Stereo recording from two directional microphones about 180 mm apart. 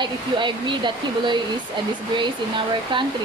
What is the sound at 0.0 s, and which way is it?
Speech, 25° right (ahead or behind).